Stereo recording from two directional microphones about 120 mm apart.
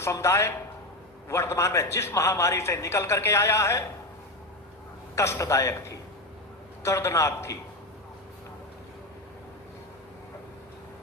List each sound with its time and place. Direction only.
0.0 s a man's voice: 20° left (ahead or behind)
5.1 s a man's voice: 25° left (ahead or behind)